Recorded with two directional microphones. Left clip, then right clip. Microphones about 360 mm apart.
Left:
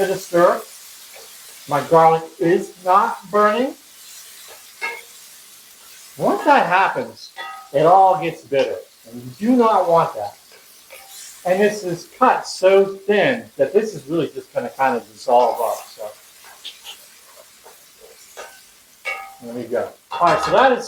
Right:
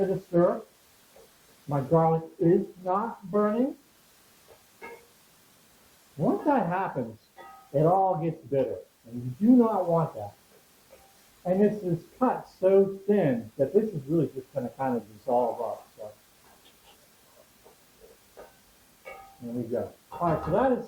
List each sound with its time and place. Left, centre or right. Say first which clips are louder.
0.0 s speech: left 9 dB; centre
1.7 s speech: left 11 dB; centre
6.1 s speech: left 11 dB; centre
11.4 s speech: left 8 dB; centre
19.0 s speech: left 14 dB; centre